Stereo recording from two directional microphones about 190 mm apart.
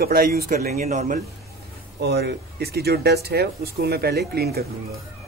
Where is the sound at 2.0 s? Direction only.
60° right (ahead or behind).